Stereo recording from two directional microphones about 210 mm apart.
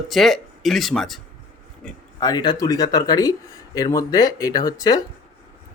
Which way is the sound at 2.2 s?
20° left (ahead or behind).